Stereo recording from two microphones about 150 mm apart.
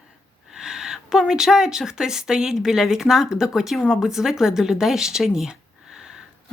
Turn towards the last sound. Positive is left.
turn(degrees=-5)  # may be behind; listen again after turning